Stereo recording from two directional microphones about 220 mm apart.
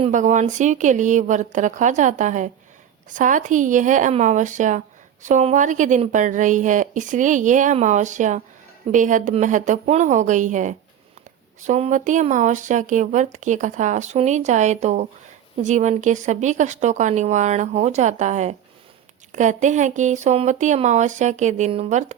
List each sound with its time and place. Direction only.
0.0 s speech: 35° right (ahead or behind)